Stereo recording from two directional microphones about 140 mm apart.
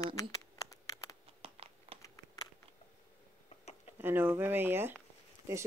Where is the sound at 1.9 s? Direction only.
25° left (ahead or behind).